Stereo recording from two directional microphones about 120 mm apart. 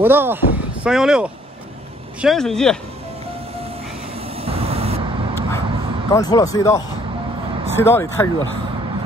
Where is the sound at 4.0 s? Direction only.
55° right (ahead or behind).